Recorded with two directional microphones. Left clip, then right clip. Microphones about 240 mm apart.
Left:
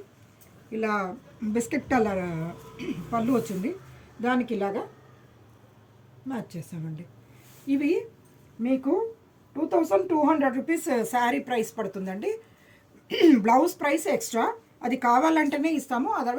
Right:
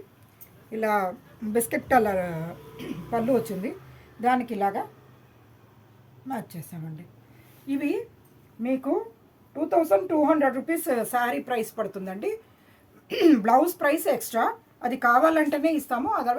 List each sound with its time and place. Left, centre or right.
0.7 s a woman's voice: right
6.2 s a woman's voice: right
7.7 s a woman's voice: centre
9.6 s a woman's voice: centre